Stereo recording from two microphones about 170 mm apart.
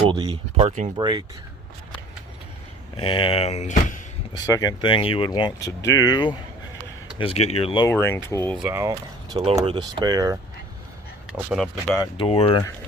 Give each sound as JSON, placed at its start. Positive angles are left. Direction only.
{"t": 0.1, "sound": "speech", "side_deg": -30}
{"t": 0.9, "sound": "speech", "side_deg": -25}
{"t": 2.9, "sound": "speech", "side_deg": 30}
{"t": 4.4, "sound": "speech", "side_deg": 20}
{"t": 7.2, "sound": "speech", "side_deg": 35}
{"t": 7.9, "sound": "speech", "side_deg": 15}
{"t": 8.6, "sound": "speech", "side_deg": -15}
{"t": 11.3, "sound": "speech", "side_deg": 0}
{"t": 12.1, "sound": "speech", "side_deg": 35}